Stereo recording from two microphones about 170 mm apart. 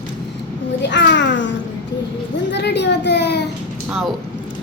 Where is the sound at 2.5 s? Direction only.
90° left.